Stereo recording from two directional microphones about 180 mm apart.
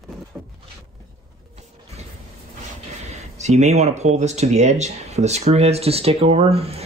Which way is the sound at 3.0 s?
40° right (ahead or behind).